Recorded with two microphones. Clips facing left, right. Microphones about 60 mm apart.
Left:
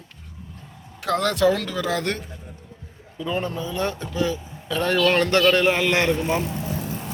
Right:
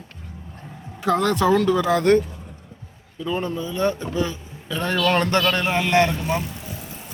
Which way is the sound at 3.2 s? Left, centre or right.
Centre.